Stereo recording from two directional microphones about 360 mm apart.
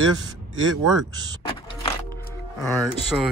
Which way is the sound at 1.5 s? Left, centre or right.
Centre.